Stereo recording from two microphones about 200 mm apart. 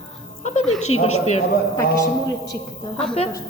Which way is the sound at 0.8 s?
35° left (ahead or behind).